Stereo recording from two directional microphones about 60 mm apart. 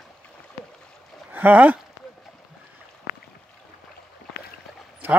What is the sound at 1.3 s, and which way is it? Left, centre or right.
Speech, right.